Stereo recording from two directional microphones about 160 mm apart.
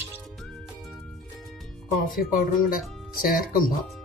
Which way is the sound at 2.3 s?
60° left (ahead or behind).